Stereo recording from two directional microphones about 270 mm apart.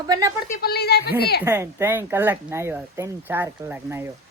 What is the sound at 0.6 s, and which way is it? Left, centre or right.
Speech, left.